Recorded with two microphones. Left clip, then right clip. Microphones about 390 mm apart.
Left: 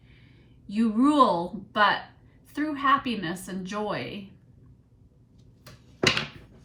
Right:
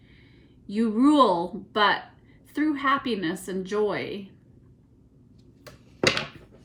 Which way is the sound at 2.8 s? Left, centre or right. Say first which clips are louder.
Left 4 dB; right.